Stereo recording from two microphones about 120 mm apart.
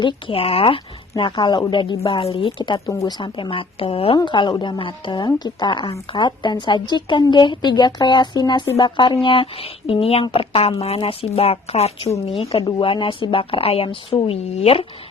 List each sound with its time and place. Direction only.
0.0 s a woman's voice: 50° left (ahead or behind)
2.0 s a woman's voice: 55° left (ahead or behind)
2.8 s speech: 30° left (ahead or behind)
3.2 s a woman's voice: 40° left (ahead or behind); by 14.8 s 55° left (ahead or behind)